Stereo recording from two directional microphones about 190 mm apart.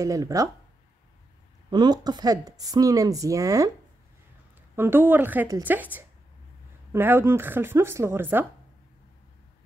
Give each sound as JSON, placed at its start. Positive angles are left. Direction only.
{"t": 0.0, "sound": "speech", "side_deg": -15}
{"t": 1.7, "sound": "speech", "side_deg": -20}
{"t": 4.7, "sound": "speech", "side_deg": -10}